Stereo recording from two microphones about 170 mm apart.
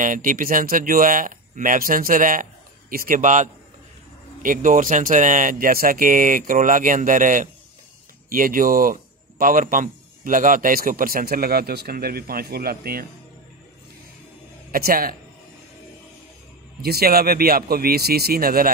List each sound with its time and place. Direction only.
0.0 s a man's voice: 50° right (ahead or behind)
14.7 s a man's voice: 60° right (ahead or behind)
16.8 s a man's voice: 65° right (ahead or behind)